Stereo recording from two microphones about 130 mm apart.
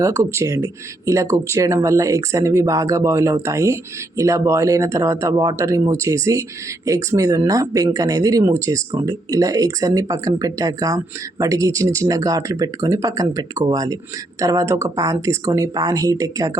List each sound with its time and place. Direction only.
0.0 s speech: 20° right (ahead or behind)